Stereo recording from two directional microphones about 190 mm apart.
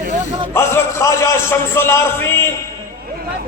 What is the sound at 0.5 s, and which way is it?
Speech, 15° left (ahead or behind).